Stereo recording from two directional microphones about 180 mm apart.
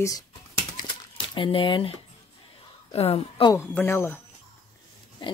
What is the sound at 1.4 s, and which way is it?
A woman's voice, 30° left (ahead or behind).